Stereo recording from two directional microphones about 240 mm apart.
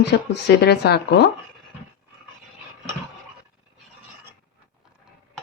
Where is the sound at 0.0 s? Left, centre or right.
Left.